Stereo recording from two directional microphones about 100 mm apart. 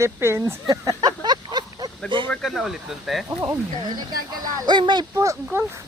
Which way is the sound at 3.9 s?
40° right (ahead or behind).